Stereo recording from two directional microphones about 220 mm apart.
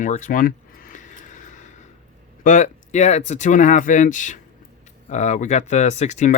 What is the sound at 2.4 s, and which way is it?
Speech, 35° left (ahead or behind).